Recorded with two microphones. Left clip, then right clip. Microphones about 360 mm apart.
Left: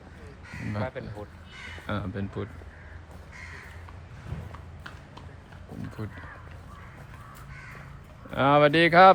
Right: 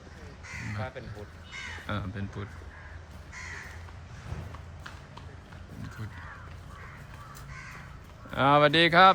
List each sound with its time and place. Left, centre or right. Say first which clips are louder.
1.0 s speech: left 4 dB; centre
1.9 s speech: left 7 dB; centre
6.0 s speech: left 6 dB; centre
8.3 s speech: left 1 dB; centre